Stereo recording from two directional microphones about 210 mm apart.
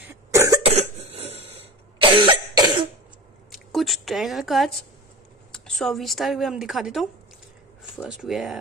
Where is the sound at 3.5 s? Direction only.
Centre (ahead or behind).